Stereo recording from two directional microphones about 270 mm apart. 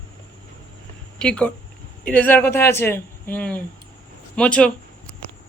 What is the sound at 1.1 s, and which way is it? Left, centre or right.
Speech, centre.